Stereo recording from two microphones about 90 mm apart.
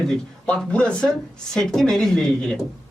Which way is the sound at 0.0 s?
10° left (ahead or behind).